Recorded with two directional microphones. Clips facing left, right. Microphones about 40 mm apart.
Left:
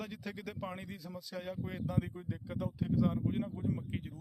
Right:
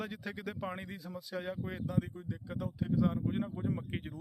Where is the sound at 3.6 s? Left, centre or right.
Right.